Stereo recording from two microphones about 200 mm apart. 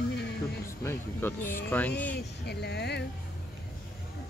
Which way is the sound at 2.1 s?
55° left (ahead or behind).